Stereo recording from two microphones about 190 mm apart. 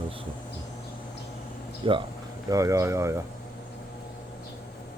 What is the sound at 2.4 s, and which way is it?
Speech, 15° right (ahead or behind).